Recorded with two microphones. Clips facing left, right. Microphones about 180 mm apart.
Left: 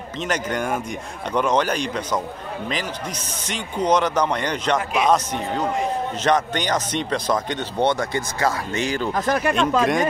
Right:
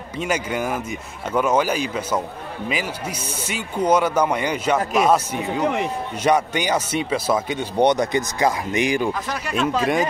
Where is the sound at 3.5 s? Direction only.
10° right (ahead or behind).